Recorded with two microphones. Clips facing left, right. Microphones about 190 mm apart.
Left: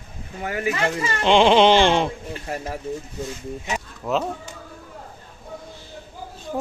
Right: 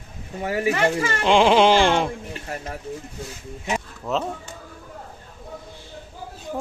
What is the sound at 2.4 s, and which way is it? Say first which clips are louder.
Speech: left 4 dB; 30° left (ahead or behind).